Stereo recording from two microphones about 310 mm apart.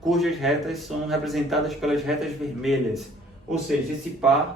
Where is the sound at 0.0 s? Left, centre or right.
Centre.